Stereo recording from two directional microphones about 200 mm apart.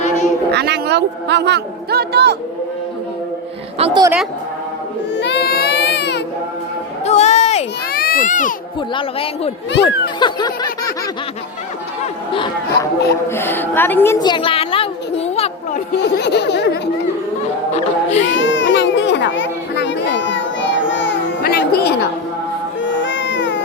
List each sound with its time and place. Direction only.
0.5 s speech: 55° right (ahead or behind)
3.8 s a woman's voice: 30° right (ahead or behind)
5.1 s baby cry: 60° left (ahead or behind)
7.0 s a sound: 35° left (ahead or behind)
7.9 s speech: 45° left (ahead or behind)
9.0 s speech: 30° left (ahead or behind)
12.3 s speech: 25° left (ahead or behind)
13.2 s a woman's voice: 10° left (ahead or behind); by 15.8 s 30° left (ahead or behind)
16.1 s speech: 60° left (ahead or behind)
18.2 s children playing: 65° left (ahead or behind)
22.8 s cat: 70° left (ahead or behind)